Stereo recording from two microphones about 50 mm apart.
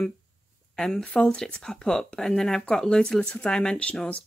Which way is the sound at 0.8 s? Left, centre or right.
Centre.